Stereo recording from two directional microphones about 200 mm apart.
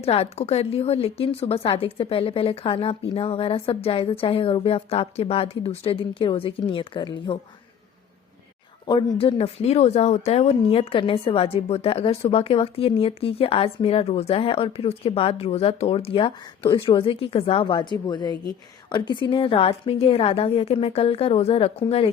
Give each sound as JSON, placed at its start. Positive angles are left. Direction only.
{"t": 0.0, "sound": "a woman's voice", "side_deg": 30}
{"t": 8.9, "sound": "a woman's voice", "side_deg": 25}